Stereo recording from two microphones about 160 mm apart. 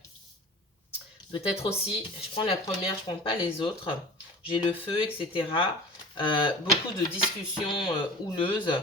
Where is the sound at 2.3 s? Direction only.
35° left (ahead or behind).